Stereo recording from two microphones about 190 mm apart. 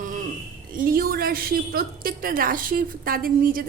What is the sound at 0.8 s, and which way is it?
A woman's voice, 50° right (ahead or behind).